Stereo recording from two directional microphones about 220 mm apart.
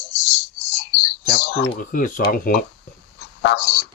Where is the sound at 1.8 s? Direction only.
40° left (ahead or behind).